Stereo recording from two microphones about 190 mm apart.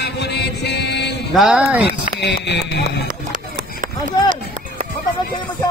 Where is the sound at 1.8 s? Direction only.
60° left (ahead or behind).